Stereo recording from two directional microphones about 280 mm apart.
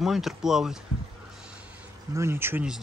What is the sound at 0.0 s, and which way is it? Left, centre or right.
Speech, centre.